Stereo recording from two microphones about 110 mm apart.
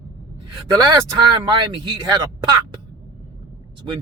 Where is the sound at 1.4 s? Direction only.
40° right (ahead or behind).